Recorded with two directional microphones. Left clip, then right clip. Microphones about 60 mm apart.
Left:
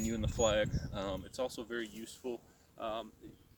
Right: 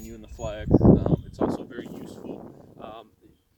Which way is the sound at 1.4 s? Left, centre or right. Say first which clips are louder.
Right 6 dB; left.